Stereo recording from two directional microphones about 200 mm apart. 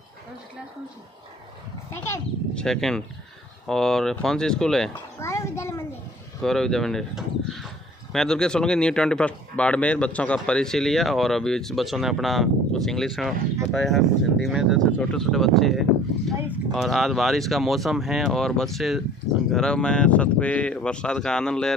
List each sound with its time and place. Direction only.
1.9 s a child's voice: 15° left (ahead or behind)
5.2 s a child's voice: 15° left (ahead or behind)
6.4 s speech: centre (ahead or behind)